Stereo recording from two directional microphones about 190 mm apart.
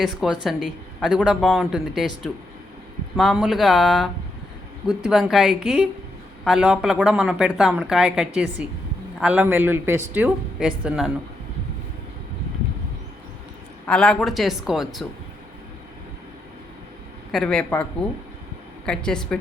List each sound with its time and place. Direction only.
0.0 s a man's voice: centre (ahead or behind)
13.8 s speech: 5° left (ahead or behind)
17.3 s speech: 5° left (ahead or behind)
18.9 s speech: 5° left (ahead or behind)